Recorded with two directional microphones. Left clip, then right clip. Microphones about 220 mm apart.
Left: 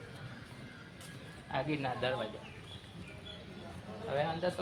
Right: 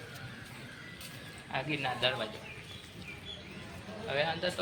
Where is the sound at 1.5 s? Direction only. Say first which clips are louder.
Right 1 dB; 45° left (ahead or behind).